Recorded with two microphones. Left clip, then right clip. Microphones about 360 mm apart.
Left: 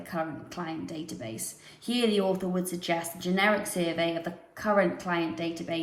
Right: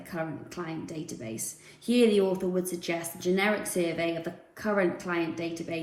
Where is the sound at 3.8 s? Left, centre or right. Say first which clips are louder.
Even; centre.